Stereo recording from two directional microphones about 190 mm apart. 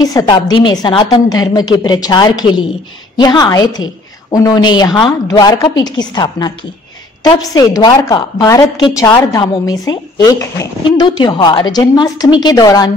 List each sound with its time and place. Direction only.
0.0 s speech: 20° left (ahead or behind)